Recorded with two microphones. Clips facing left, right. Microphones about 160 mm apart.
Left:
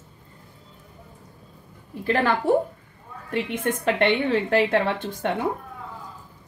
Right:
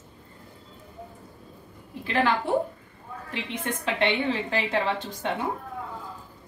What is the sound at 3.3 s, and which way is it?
A woman's voice, 50° left (ahead or behind).